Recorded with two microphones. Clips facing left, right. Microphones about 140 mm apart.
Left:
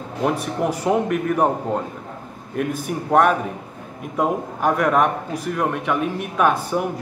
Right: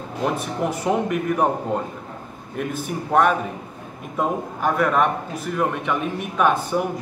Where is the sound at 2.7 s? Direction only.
5° left (ahead or behind).